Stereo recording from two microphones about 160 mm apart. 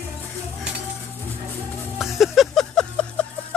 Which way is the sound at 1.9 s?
Centre (ahead or behind).